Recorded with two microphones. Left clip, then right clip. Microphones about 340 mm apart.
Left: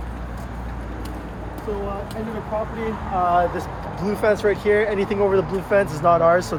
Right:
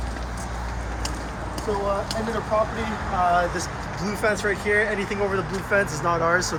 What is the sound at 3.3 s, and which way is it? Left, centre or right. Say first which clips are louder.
Speech: left 2 dB; left.